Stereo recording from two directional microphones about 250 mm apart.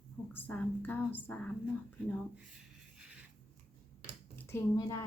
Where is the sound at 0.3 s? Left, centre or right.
Centre.